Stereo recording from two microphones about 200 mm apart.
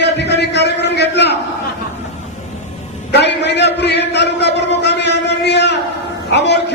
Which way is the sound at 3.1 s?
60° left (ahead or behind).